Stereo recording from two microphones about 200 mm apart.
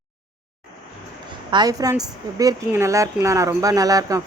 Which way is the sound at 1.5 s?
20° right (ahead or behind).